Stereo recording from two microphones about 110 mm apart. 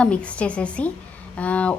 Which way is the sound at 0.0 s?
10° left (ahead or behind).